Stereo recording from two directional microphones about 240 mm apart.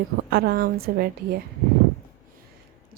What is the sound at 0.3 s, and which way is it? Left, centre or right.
Speech, right.